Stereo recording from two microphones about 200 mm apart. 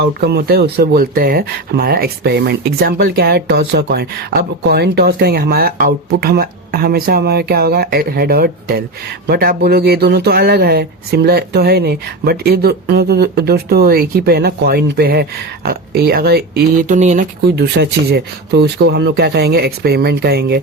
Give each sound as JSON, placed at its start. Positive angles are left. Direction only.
{"t": 0.0, "sound": "speech", "side_deg": -55}
{"t": 17.0, "sound": "speech", "side_deg": -35}
{"t": 17.5, "sound": "speech", "side_deg": -55}